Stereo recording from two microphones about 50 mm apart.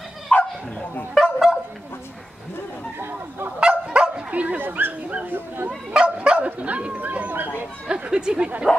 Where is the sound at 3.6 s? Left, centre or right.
Centre.